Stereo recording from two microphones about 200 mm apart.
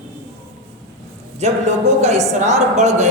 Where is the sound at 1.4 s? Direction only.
35° right (ahead or behind).